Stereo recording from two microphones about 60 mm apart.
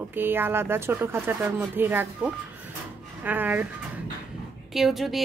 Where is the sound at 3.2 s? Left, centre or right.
Right.